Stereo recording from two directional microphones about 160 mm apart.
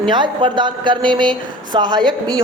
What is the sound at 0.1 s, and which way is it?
A woman's voice, 30° right (ahead or behind).